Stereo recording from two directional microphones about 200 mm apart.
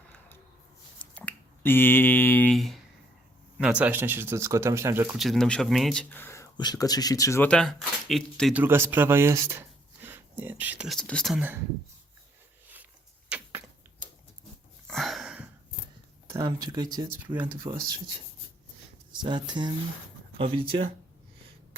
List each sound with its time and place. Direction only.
0.9 s finger snapping: 5° left (ahead or behind)
3.6 s speech: 5° right (ahead or behind)
5.2 s speech: centre (ahead or behind)
8.6 s speech: 10° right (ahead or behind)
12.6 s a sound: 10° right (ahead or behind)
14.8 s a sound: centre (ahead or behind)
16.3 s speech: 15° right (ahead or behind)
19.2 s speech: 20° right (ahead or behind)